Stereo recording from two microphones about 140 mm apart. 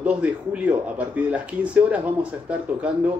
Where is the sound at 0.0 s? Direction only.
10° right (ahead or behind).